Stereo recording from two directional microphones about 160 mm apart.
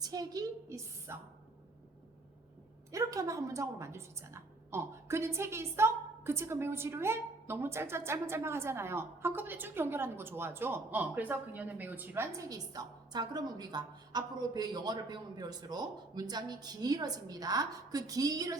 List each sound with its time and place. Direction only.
0.0 s a woman's voice: 25° right (ahead or behind)
2.9 s a woman's voice: 20° right (ahead or behind)